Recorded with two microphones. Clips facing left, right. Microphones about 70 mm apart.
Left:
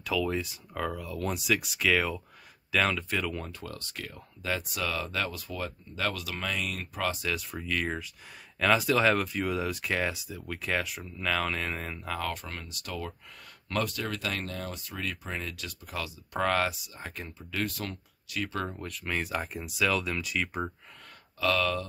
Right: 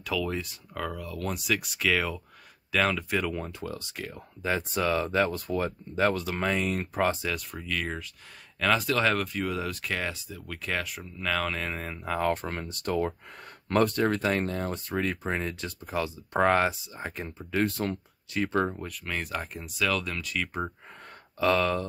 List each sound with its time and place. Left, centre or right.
0.0 s speech: centre
4.4 s speech: right
5.3 s speech: right
7.3 s speech: centre
12.0 s speech: centre
12.3 s speech: right
18.7 s speech: centre
21.4 s speech: right